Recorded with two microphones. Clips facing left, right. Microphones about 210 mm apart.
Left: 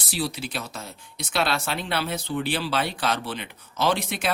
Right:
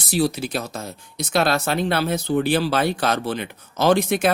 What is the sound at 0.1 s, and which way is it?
Speech, 45° right (ahead or behind).